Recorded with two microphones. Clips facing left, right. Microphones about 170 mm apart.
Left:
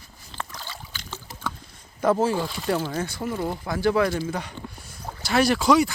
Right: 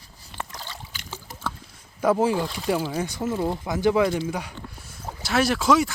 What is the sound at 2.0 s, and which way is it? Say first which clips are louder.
Speech: right 1 dB; 10° right (ahead or behind).